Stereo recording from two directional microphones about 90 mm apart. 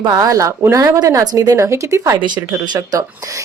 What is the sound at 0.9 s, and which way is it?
A woman's voice, 45° right (ahead or behind).